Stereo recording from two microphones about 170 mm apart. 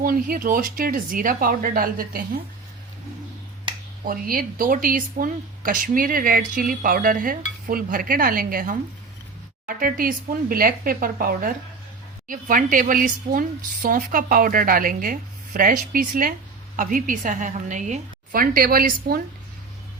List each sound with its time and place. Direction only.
0.0 s speech: 55° right (ahead or behind)
4.0 s a woman's voice: 60° right (ahead or behind)